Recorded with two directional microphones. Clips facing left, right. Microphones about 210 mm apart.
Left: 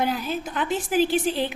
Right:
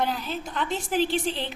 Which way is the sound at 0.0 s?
5° left (ahead or behind).